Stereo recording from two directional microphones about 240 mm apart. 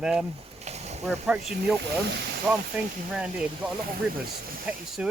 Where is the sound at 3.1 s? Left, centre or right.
Centre.